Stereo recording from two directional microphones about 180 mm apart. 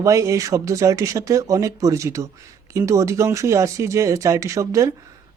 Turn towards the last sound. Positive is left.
turn(degrees=-15)  # may be behind; listen again after turning